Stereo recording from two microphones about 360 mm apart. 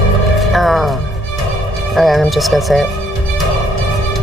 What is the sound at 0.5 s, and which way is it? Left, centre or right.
Music, centre.